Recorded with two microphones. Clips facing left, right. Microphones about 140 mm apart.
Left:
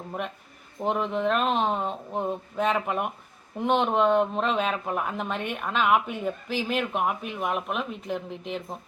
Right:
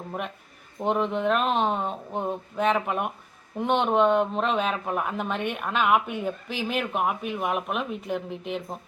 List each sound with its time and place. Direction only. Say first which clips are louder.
0.8 s speech: right 1 dB; centre (ahead or behind)